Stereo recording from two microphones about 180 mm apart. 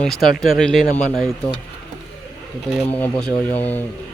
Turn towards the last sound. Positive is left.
turn(degrees=10)  # may be behind; listen again after turning